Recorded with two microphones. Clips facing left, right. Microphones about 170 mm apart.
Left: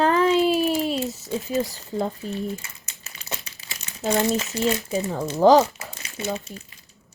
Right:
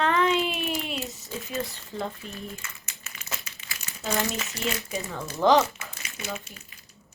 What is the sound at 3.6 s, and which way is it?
Crumpling, 25° left (ahead or behind).